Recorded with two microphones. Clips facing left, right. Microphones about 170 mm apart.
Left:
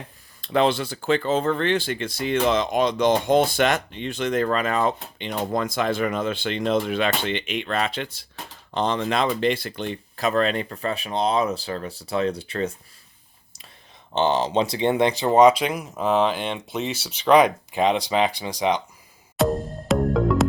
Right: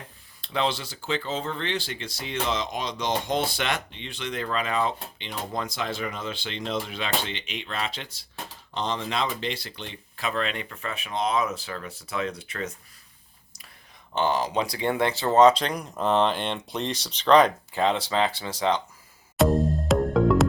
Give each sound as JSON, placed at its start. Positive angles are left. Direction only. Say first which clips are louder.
{"t": 0.4, "sound": "speech", "louder": "left 7 dB", "side_deg": 50}
{"t": 14.1, "sound": "speech", "louder": "left 4 dB", "side_deg": 25}
{"t": 19.4, "sound": "music", "louder": "right 1 dB", "side_deg": 0}